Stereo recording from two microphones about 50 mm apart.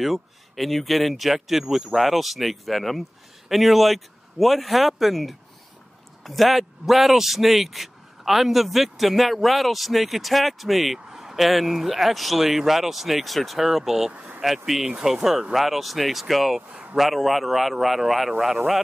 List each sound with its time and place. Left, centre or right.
0.0 s speech: centre
14.1 s speech: right
14.7 s speech: centre